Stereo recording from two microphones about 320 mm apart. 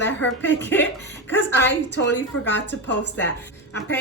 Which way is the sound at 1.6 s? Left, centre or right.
Left.